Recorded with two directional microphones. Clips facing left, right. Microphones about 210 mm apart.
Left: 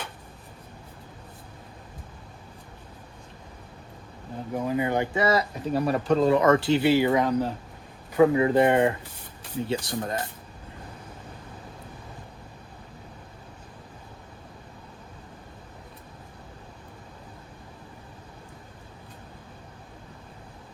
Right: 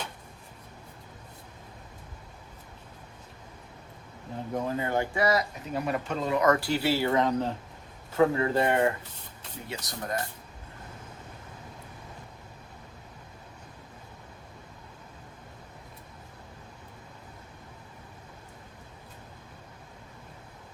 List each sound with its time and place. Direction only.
4.5 s speech: 10° left (ahead or behind); by 10.2 s 25° left (ahead or behind)